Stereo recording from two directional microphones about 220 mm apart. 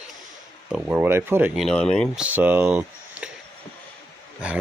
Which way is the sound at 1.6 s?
5° left (ahead or behind).